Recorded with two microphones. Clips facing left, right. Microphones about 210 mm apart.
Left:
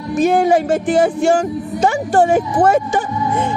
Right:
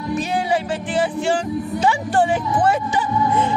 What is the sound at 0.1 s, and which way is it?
Music, 50° left (ahead or behind).